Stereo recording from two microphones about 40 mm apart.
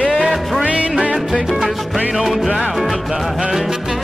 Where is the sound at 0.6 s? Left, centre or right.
Right.